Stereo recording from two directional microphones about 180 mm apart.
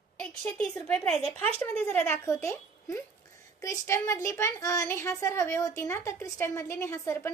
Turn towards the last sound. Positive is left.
turn(degrees=15)  # may be behind; listen again after turning